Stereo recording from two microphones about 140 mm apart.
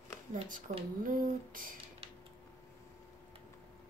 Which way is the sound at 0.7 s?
60° right (ahead or behind).